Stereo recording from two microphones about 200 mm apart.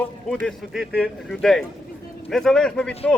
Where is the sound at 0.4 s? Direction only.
Centre (ahead or behind).